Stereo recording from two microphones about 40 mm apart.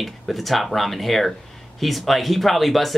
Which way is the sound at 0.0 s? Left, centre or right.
Centre.